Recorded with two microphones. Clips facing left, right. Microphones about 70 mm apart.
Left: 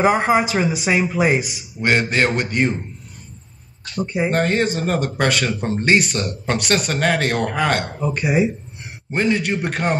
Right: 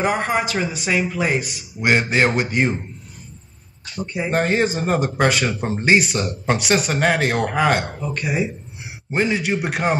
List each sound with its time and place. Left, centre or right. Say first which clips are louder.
0.0 s speech: left 4 dB; centre
1.8 s speech: even; centre
3.8 s speech: left 4 dB; centre
8.0 s speech: left 4 dB; centre
9.1 s speech: left 1 dB; centre